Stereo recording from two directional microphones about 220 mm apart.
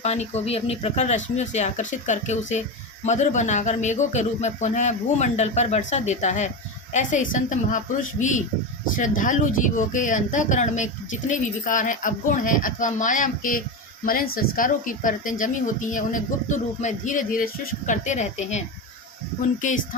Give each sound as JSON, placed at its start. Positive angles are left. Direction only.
{"t": 0.0, "sound": "speech", "side_deg": 30}
{"t": 19.6, "sound": "speech", "side_deg": 35}